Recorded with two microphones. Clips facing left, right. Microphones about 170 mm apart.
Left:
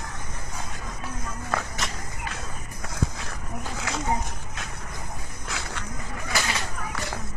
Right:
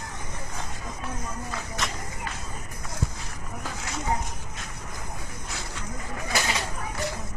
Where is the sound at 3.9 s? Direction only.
90° left.